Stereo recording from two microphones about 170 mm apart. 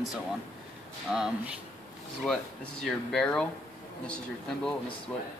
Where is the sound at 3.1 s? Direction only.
5° left (ahead or behind).